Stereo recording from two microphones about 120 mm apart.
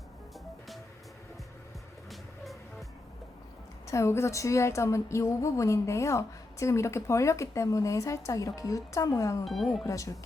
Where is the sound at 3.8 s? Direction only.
25° left (ahead or behind).